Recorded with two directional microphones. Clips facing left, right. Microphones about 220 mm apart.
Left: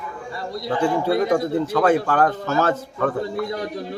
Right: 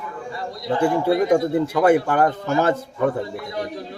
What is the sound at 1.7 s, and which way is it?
A man's voice, 10° right (ahead or behind).